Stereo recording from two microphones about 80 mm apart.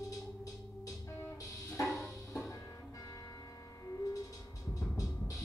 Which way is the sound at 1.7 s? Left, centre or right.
Left.